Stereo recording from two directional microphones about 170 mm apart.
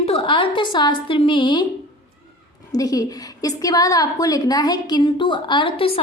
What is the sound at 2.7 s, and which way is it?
A woman's voice, 20° left (ahead or behind).